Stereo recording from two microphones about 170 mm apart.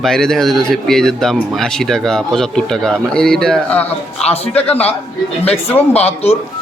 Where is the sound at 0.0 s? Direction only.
5° left (ahead or behind).